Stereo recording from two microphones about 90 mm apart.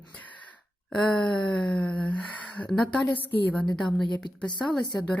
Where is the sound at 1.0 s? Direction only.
10° left (ahead or behind).